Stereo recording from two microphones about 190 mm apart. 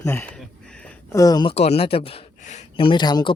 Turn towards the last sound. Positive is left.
turn(degrees=20)  # may be behind; listen again after turning